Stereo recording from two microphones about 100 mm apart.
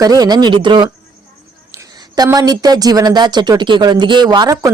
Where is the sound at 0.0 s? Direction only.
40° right (ahead or behind).